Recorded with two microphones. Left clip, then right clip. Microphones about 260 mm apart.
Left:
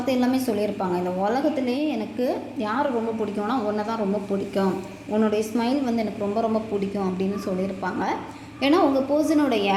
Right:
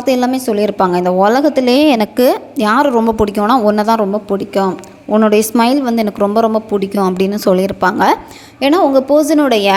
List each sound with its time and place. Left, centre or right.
0.0 s a woman's voice: right